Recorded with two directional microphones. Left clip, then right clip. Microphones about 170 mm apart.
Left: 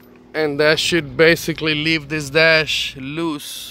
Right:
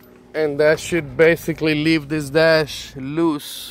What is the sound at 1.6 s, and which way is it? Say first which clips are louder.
Speech: even; 15° right (ahead or behind).